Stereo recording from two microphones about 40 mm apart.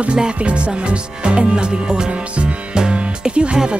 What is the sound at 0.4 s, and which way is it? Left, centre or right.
Music, right.